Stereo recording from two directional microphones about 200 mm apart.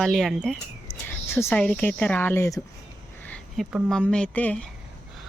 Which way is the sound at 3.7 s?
Centre (ahead or behind).